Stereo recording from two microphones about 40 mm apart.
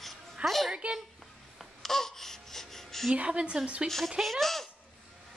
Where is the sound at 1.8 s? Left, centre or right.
Centre.